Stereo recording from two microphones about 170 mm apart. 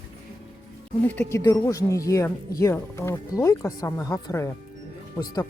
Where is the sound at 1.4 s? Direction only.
20° left (ahead or behind).